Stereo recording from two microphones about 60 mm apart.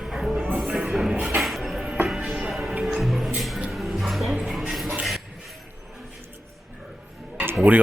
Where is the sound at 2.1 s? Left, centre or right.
Centre.